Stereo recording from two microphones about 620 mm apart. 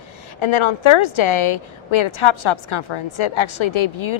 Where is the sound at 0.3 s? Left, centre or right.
Left.